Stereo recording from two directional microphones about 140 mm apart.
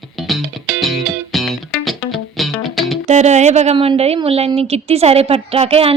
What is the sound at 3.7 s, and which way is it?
A woman's voice, 40° right (ahead or behind).